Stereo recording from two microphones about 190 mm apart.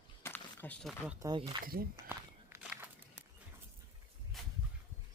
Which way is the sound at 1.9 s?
10° right (ahead or behind).